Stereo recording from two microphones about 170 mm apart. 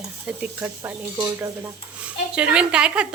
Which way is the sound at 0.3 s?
10° right (ahead or behind).